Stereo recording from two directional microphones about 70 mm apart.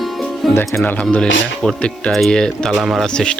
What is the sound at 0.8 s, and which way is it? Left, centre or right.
Speech, left.